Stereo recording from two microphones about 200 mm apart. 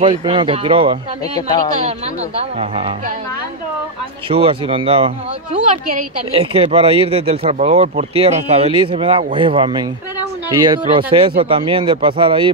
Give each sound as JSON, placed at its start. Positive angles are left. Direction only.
{"t": 0.0, "sound": "speech", "side_deg": -25}
{"t": 2.6, "sound": "speech", "side_deg": -30}
{"t": 4.3, "sound": "speech", "side_deg": -25}